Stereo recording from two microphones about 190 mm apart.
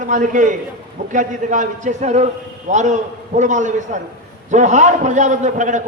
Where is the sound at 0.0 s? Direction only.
40° right (ahead or behind).